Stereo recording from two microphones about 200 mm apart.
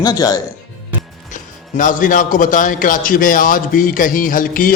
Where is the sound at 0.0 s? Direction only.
20° left (ahead or behind).